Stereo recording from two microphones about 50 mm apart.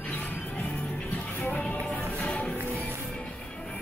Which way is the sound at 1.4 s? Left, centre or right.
Left.